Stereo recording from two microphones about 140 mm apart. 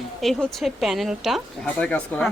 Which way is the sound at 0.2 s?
Centre (ahead or behind).